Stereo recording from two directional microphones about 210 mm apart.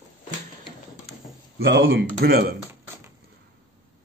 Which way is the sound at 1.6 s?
60° right (ahead or behind).